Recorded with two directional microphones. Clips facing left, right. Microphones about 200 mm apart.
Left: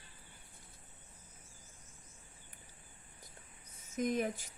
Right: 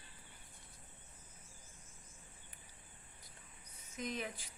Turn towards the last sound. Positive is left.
turn(degrees=45)  # may be behind; listen again after turning